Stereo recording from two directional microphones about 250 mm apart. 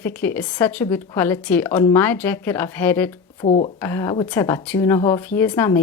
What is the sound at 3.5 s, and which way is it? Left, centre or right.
Speech, left.